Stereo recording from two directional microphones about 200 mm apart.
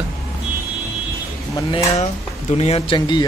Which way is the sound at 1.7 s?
15° left (ahead or behind).